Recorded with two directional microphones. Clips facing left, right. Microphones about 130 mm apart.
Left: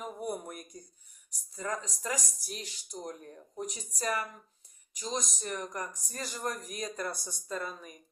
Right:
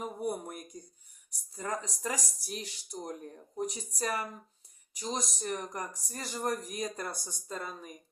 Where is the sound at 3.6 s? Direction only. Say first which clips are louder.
Right 1 dB; 30° right (ahead or behind).